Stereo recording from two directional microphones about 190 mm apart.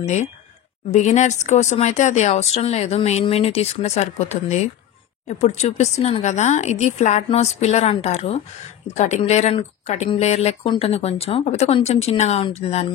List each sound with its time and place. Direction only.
0.0 s speech: 40° left (ahead or behind)